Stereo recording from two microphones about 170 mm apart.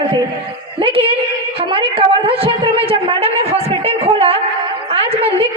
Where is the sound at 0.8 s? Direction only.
30° right (ahead or behind).